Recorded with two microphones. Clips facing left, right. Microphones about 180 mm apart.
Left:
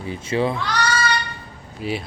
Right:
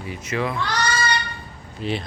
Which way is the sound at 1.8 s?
5° left (ahead or behind).